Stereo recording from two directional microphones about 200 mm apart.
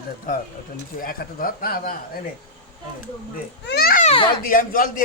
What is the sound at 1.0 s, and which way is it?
Speech, 45° left (ahead or behind).